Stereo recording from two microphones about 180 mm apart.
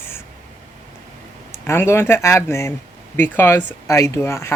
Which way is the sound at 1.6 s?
15° left (ahead or behind).